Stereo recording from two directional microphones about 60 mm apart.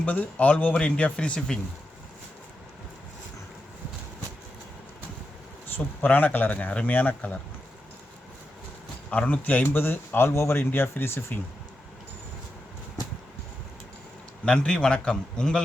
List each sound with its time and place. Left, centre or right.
0.0 s speech: left
5.6 s speech: left
9.0 s a man's voice: left
14.4 s a man's voice: centre